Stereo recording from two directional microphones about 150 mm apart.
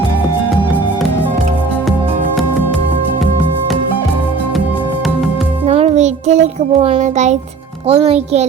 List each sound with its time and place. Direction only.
5.6 s music: 45° right (ahead or behind)
7.0 s a child's voice: 50° right (ahead or behind)
7.9 s a child's voice: 40° right (ahead or behind)